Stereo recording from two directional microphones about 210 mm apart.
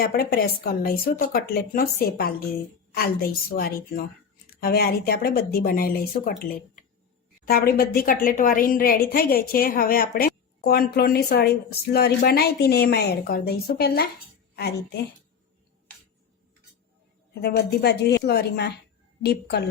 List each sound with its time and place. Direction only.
0.0 s a woman's voice: 45° left (ahead or behind)
7.4 s a woman's voice: 45° left (ahead or behind)
17.4 s a woman's voice: 50° left (ahead or behind)